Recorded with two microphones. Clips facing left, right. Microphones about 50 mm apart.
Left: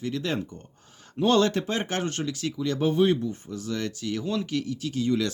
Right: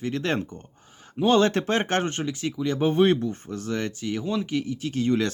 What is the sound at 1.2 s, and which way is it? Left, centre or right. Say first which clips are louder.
Speech: right 1 dB; centre.